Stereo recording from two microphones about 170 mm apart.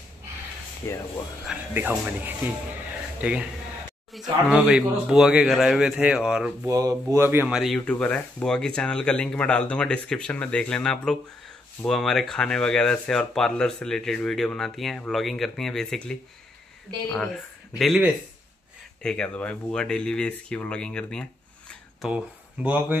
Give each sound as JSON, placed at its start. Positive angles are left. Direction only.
{"t": 0.8, "sound": "speech", "side_deg": 15}
{"t": 1.4, "sound": "speech", "side_deg": -10}
{"t": 6.6, "sound": "speech", "side_deg": -20}
{"t": 17.7, "sound": "speech", "side_deg": 0}
{"t": 22.1, "sound": "speech", "side_deg": -10}